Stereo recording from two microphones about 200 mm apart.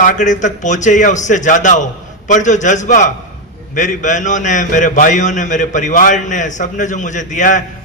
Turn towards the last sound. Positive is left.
turn(degrees=40)  # may be behind; listen again after turning